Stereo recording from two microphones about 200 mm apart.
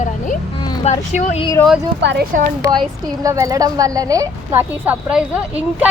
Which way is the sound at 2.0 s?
60° right (ahead or behind).